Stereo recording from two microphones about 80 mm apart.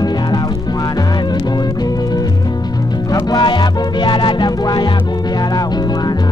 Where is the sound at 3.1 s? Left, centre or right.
Left.